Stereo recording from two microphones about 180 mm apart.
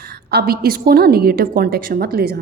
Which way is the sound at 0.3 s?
60° right (ahead or behind).